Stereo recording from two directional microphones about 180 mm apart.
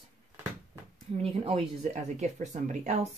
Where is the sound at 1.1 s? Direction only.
35° right (ahead or behind).